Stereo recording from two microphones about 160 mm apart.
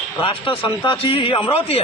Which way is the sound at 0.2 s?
35° left (ahead or behind).